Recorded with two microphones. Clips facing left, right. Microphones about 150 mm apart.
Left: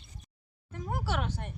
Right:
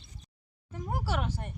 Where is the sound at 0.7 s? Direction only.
5° right (ahead or behind).